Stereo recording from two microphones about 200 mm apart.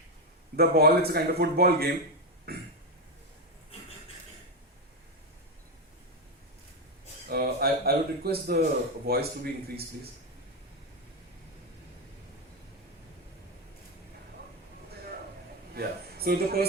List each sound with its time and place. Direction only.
0.5 s a man's voice: 50° right (ahead or behind)
7.3 s a man's voice: 50° right (ahead or behind)
15.7 s speech: 50° right (ahead or behind)